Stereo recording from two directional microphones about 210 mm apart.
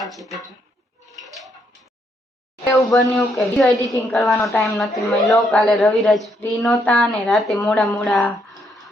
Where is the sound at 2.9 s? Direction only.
Centre (ahead or behind).